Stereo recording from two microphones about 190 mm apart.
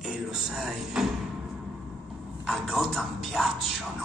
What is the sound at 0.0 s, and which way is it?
Speech, centre (ahead or behind).